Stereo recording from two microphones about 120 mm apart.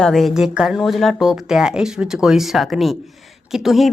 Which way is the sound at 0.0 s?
Centre (ahead or behind).